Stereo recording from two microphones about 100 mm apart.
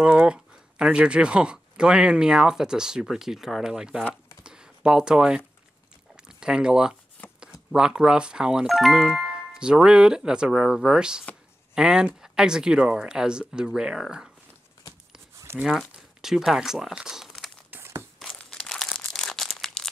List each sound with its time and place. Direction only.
0.0 s speech: 10° right (ahead or behind)
4.1 s a sound: 10° right (ahead or behind)
7.7 s speech: 5° right (ahead or behind)
15.6 s speech: 5° right (ahead or behind)
17.6 s a sound: 20° right (ahead or behind)
18.5 s crumpling: 5° left (ahead or behind)